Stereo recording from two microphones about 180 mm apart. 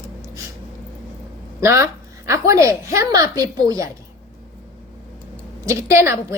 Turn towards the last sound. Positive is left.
turn(degrees=-15)  # may be behind; listen again after turning